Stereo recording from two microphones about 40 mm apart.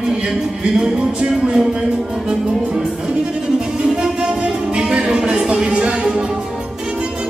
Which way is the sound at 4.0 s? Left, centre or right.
Right.